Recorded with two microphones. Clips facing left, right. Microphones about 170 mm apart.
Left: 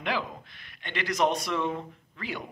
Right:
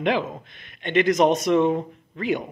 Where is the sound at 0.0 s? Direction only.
20° right (ahead or behind).